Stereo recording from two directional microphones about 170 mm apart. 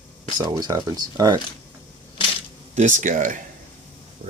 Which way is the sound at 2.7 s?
45° right (ahead or behind).